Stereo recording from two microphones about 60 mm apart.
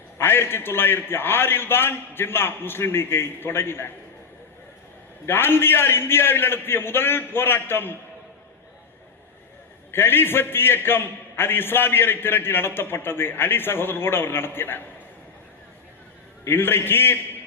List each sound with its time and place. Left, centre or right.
0.2 s a man's voice: left
5.2 s a man's voice: left
9.9 s a man's voice: left
16.5 s a man's voice: left